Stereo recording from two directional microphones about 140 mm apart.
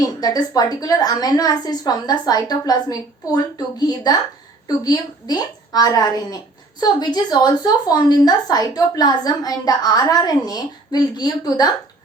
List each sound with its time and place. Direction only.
0.2 s a woman's voice: 25° left (ahead or behind)